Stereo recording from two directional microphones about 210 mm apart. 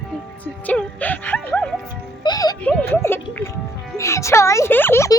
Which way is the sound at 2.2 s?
20° left (ahead or behind).